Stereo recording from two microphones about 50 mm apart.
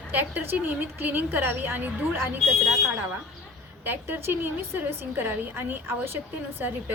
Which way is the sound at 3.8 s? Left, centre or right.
Right.